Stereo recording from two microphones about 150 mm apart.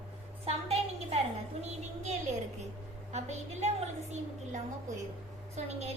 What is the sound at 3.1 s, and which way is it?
A woman's voice, 45° right (ahead or behind).